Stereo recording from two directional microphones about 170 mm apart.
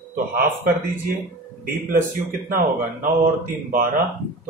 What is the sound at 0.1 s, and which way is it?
Speech, 55° right (ahead or behind).